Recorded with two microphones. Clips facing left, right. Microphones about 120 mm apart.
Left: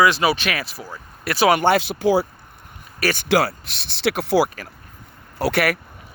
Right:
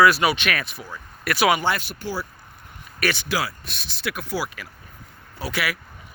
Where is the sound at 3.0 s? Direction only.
45° left (ahead or behind).